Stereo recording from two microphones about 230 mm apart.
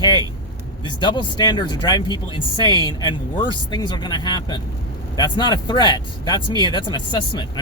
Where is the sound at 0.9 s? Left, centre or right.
Centre.